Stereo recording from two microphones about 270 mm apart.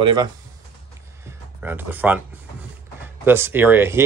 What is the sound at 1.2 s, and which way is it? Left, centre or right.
Music, centre.